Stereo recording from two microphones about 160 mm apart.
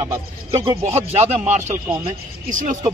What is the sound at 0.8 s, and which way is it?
A man's voice, 40° right (ahead or behind).